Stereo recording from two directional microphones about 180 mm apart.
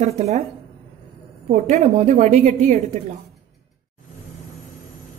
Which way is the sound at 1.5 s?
40° right (ahead or behind).